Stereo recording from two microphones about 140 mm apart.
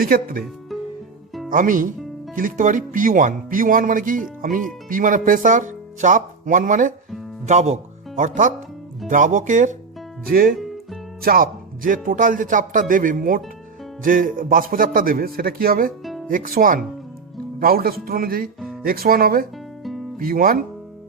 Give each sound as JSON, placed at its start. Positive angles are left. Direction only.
{"t": 0.0, "sound": "a man's voice", "side_deg": -90}
{"t": 1.5, "sound": "speech", "side_deg": -75}
{"t": 7.4, "sound": "speech", "side_deg": -55}
{"t": 9.0, "sound": "speech", "side_deg": -70}
{"t": 10.2, "sound": "a man's voice", "side_deg": -90}
{"t": 12.0, "sound": "a man's voice", "side_deg": -75}
{"t": 16.3, "sound": "speech", "side_deg": -80}
{"t": 17.6, "sound": "a man's voice", "side_deg": -90}
{"t": 19.8, "sound": "music", "side_deg": 0}
{"t": 20.1, "sound": "a man's voice", "side_deg": -90}